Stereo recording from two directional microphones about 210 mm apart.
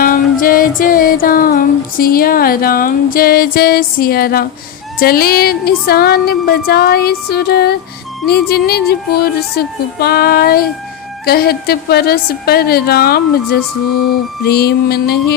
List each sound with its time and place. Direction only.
0.0 s music: 40° left (ahead or behind)
0.8 s speech: 40° left (ahead or behind)